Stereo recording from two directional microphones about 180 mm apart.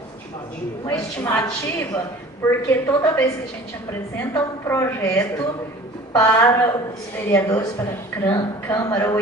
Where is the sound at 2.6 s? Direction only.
15° left (ahead or behind).